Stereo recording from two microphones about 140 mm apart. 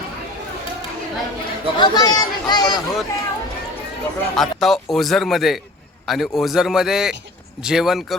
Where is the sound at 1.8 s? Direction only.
30° left (ahead or behind).